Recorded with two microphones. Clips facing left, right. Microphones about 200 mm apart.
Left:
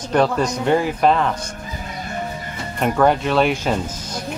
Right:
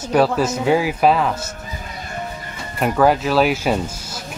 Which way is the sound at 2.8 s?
5° right (ahead or behind).